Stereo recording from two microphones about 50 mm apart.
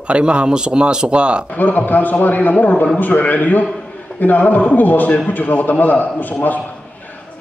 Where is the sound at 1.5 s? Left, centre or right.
Left.